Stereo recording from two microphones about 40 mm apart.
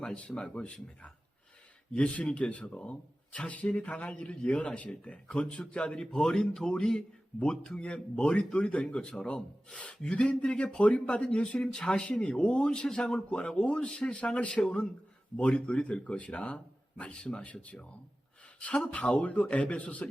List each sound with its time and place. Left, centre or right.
0.0 s speech: centre
6.1 s a man's voice: centre; by 20.1 s left